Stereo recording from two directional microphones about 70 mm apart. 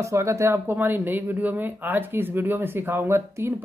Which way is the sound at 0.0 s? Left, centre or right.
Right.